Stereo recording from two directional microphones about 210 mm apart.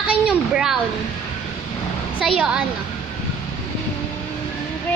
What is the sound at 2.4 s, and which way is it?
Speech, 5° right (ahead or behind).